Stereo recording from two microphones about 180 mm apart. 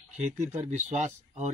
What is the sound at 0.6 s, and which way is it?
Speech, 40° right (ahead or behind).